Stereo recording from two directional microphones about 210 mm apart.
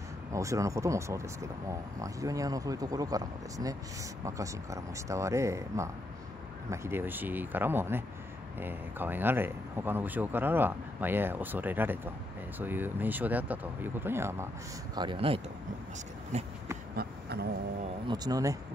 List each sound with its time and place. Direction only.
0.3 s speech: 15° right (ahead or behind)
15.0 s speech: 25° right (ahead or behind)
16.9 s a sound: 50° right (ahead or behind)
18.0 s speech: 20° right (ahead or behind)